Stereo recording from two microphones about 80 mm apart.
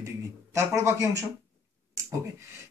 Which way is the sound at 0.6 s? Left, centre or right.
Right.